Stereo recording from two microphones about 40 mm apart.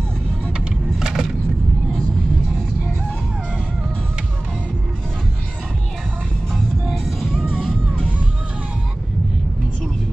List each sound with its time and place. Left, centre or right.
0.9 s vehicle: centre
6.5 s music: centre
7.4 s music: centre